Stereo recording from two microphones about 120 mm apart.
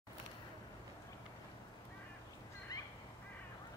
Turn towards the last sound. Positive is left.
turn(degrees=35)  # may be behind; listen again after turning